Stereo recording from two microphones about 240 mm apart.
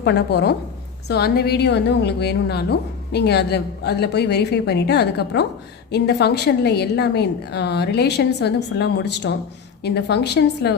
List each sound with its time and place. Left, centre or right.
0.0 s a woman's voice: left